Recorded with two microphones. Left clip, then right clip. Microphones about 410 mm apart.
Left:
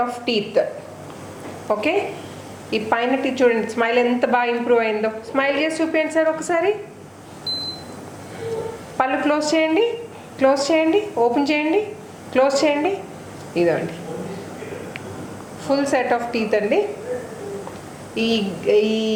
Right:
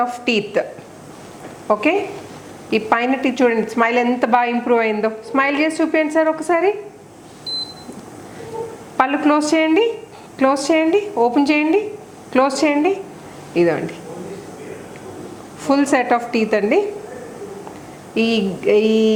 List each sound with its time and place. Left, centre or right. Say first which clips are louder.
0.1 s a woman's voice: right 2 dB; right
1.6 s a woman's voice: right 3 dB; right
9.0 s a woman's voice: right 3 dB; right
15.6 s a woman's voice: right 3 dB; right
18.1 s a sound: right 3 dB; right